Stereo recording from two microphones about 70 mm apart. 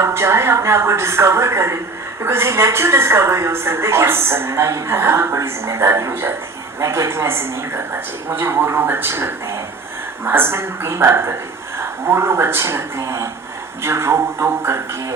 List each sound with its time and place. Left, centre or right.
0.0 s a woman's voice: right